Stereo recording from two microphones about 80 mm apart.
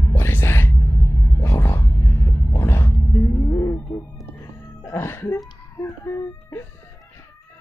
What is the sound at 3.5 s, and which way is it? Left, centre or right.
Music, left.